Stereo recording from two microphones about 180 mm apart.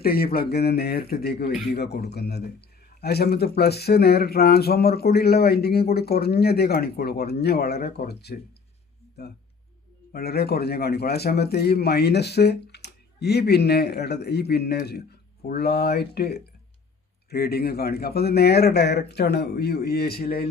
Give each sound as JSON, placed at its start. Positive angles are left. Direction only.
{"t": 0.0, "sound": "a man's voice", "side_deg": 55}